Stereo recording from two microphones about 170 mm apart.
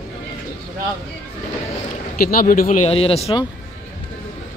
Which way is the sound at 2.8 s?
35° left (ahead or behind).